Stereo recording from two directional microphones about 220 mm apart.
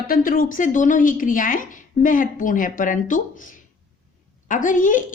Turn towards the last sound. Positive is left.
turn(degrees=35)  # may be behind; listen again after turning